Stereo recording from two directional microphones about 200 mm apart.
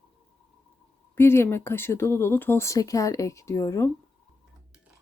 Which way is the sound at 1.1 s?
10° left (ahead or behind).